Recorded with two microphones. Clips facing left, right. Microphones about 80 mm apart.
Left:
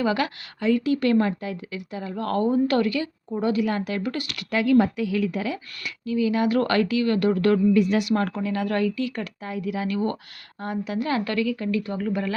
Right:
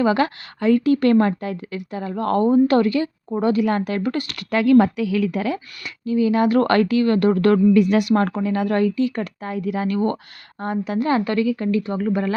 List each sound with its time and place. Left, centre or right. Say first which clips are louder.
0.0 s speech: right 5 dB; right
0.6 s speech: right 5 dB; right
3.2 s speech: right 3 dB; right
4.5 s a woman's voice: right 5 dB; right
5.8 s speech: right 4 dB; right
11.3 s speech: right 4 dB; right
11.5 s speech: right 4 dB; right